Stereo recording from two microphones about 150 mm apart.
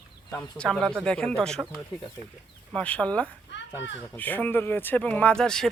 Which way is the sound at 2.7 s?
10° left (ahead or behind).